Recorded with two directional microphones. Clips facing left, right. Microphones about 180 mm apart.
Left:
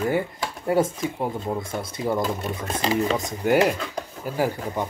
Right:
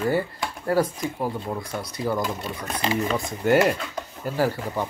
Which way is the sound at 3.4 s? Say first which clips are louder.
Right 1 dB; 15° left (ahead or behind).